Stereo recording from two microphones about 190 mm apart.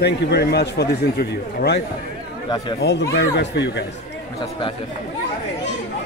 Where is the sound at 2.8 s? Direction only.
65° left (ahead or behind).